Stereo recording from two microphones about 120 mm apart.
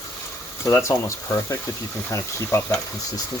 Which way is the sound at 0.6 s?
25° left (ahead or behind).